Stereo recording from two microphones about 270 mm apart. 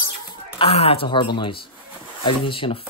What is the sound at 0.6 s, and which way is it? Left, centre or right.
Speech, left.